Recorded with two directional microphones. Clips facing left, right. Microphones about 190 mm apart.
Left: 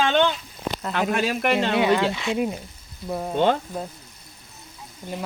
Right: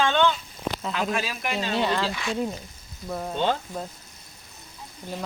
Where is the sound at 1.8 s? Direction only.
15° left (ahead or behind).